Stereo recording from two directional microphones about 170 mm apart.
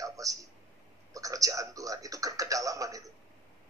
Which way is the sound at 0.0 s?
20° right (ahead or behind).